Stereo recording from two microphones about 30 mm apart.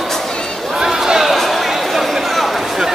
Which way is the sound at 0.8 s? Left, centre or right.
Centre.